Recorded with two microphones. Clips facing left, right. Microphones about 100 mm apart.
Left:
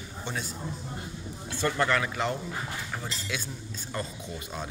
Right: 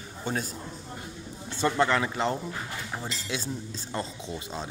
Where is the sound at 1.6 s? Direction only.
25° right (ahead or behind).